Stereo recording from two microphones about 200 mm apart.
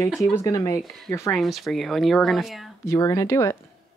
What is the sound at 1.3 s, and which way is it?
Speech, centre (ahead or behind).